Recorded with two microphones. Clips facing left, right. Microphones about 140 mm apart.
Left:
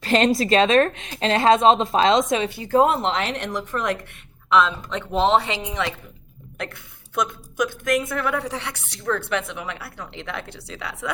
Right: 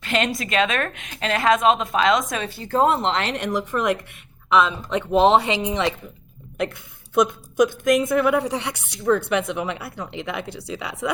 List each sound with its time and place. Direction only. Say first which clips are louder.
0.0 s a woman's voice: left 5 dB; 35° left (ahead or behind)
2.7 s speech: left 1 dB; 5° left (ahead or behind); by 5.9 s 25° right (ahead or behind)
7.1 s speech: right 6 dB; 20° right (ahead or behind)